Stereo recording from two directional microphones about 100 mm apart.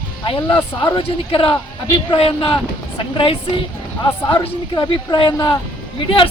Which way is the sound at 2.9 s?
55° left (ahead or behind).